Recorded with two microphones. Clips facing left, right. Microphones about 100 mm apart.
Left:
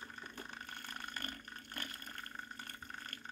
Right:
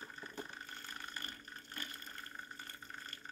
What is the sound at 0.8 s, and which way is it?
Water, 55° left (ahead or behind).